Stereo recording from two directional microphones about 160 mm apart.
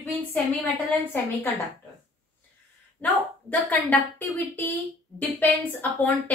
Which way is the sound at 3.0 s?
10° left (ahead or behind).